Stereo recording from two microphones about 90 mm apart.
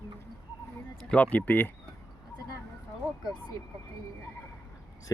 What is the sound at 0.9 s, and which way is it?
Speech, 15° left (ahead or behind).